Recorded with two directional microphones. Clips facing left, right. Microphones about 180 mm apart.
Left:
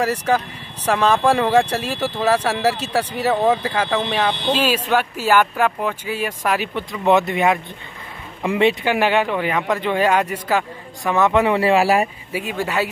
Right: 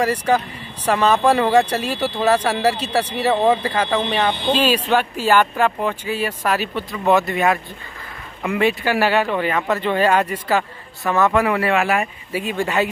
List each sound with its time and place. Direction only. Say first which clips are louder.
0.8 s speech: right 1 dB; 10° right (ahead or behind)
2.2 s speech: right 1 dB; 5° left (ahead or behind); by 12.1 s 35° left (ahead or behind)
12.3 s speech: right 2 dB; 10° left (ahead or behind)